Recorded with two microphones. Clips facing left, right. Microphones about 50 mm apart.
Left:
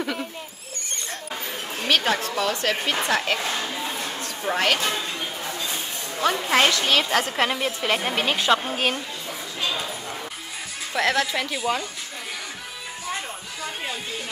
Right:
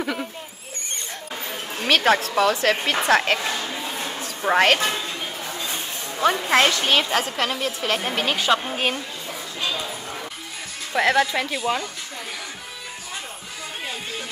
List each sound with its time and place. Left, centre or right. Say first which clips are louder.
0.0 s owl: right 1 dB; centre
1.8 s a sound: right 2 dB; centre
2.4 s speech: right 4 dB; centre
3.5 s a sound: even; centre
4.5 s speech: right 5 dB; right
5.5 s a sound: even; centre
6.4 s a woman's voice: right 1 dB; centre
6.7 s speech: right 1 dB; centre
7.1 s a woman's voice: even; centre
7.3 s a woman's voice: left 1 dB; centre
10.9 s speech: right 3 dB; centre